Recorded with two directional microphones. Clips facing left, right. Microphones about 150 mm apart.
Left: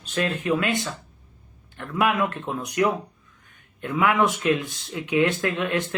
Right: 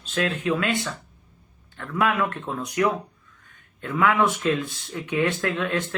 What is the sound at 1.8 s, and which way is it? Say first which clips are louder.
Speech: left 1 dB; 15° left (ahead or behind).